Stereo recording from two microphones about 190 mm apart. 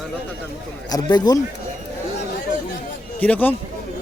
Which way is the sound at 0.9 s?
20° left (ahead or behind).